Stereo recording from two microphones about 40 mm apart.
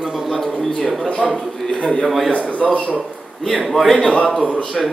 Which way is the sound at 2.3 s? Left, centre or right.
Left.